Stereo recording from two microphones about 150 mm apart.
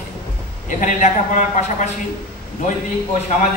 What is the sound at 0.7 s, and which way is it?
A man's voice, 60° left (ahead or behind).